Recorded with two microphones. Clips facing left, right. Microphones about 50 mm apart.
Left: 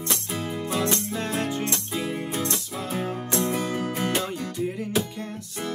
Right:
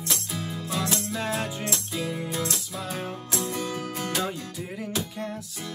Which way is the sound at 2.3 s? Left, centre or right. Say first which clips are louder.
Left 2 dB; centre.